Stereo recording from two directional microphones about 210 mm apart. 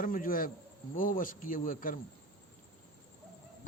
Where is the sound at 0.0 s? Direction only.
40° left (ahead or behind).